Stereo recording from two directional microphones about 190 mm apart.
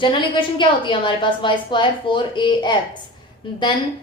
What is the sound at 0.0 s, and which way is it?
A woman's voice, 25° left (ahead or behind).